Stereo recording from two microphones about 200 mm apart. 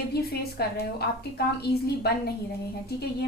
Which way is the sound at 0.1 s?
50° left (ahead or behind).